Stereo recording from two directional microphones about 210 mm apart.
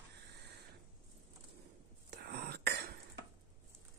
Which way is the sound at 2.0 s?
50° right (ahead or behind).